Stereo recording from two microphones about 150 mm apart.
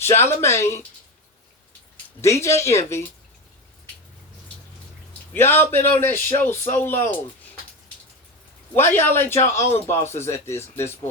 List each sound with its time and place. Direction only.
0.0 s a man's voice: 15° left (ahead or behind)
2.2 s speech: 20° left (ahead or behind)
5.3 s a man's voice: 15° left (ahead or behind)
8.7 s a man's voice: 15° left (ahead or behind)